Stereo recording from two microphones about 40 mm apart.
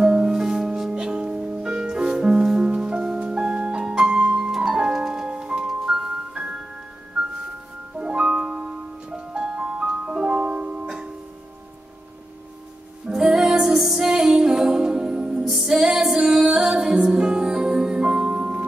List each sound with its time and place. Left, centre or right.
0.0 s music: centre
2.6 s music: right
6.3 s music: right
13.1 s music: centre
15.4 s music: centre